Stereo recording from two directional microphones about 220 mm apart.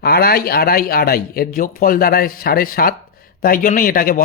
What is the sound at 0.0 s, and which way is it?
A man's voice, 45° left (ahead or behind).